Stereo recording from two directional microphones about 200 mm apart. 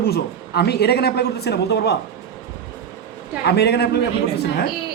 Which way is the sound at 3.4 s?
55° left (ahead or behind).